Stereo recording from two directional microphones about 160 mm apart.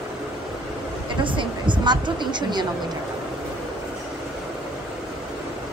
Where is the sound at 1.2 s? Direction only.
30° right (ahead or behind).